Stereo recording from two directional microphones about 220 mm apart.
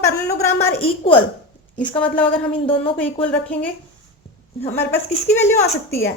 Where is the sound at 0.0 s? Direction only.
15° left (ahead or behind).